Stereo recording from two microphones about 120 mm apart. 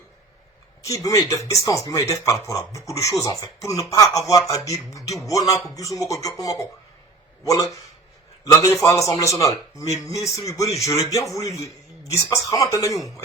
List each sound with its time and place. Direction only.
0.8 s speech: 30° left (ahead or behind)